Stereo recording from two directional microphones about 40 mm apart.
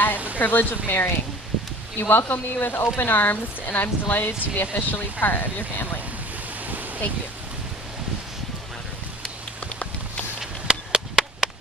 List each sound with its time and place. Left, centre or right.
0.4 s speech: left
10.7 s chop: centre